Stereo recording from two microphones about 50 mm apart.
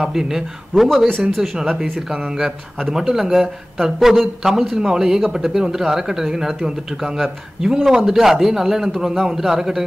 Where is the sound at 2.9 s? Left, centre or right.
Centre.